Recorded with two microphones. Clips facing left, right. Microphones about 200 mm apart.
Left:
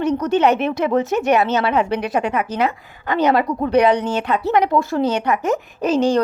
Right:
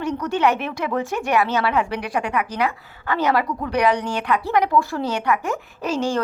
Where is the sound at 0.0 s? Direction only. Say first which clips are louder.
Left 4 dB; 20° left (ahead or behind).